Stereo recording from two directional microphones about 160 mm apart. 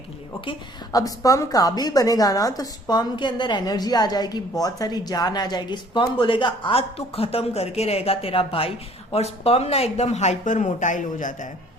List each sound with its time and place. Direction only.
0.9 s a woman's voice: 20° left (ahead or behind); by 11.3 s 50° left (ahead or behind)